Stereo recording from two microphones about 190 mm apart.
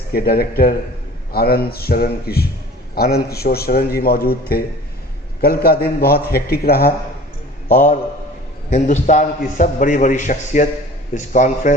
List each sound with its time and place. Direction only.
0.1 s a man's voice: 55° left (ahead or behind)
7.7 s a man's voice: 40° left (ahead or behind)